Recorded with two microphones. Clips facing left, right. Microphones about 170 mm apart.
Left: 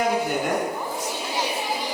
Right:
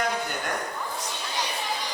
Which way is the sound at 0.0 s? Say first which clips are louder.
Left 6 dB; 10° left (ahead or behind).